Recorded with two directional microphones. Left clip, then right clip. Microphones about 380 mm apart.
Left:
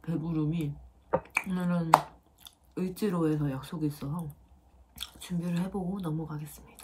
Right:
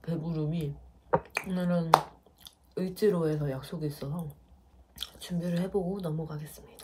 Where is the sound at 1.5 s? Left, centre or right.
Centre.